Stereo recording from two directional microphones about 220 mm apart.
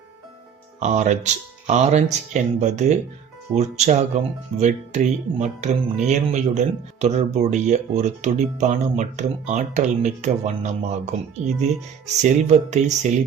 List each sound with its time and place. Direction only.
0.8 s speech: 30° right (ahead or behind)